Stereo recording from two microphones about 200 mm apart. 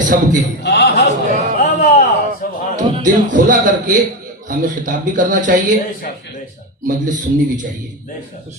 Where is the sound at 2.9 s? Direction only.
40° right (ahead or behind).